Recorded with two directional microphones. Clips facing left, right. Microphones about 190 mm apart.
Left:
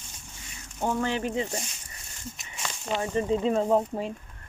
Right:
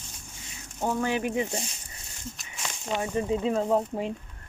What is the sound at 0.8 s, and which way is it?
Speech, 10° right (ahead or behind).